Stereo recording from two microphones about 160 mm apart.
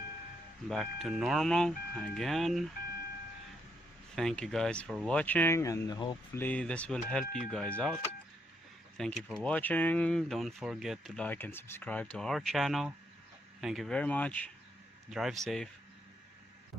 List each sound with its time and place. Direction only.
0.7 s speech: centre (ahead or behind)
4.1 s speech: 5° left (ahead or behind); by 6.1 s 25° left (ahead or behind)
6.3 s speech: 10° left (ahead or behind)
9.0 s speech: 5° left (ahead or behind)
15.1 s speech: centre (ahead or behind)